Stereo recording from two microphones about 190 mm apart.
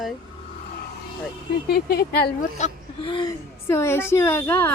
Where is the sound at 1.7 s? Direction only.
55° left (ahead or behind).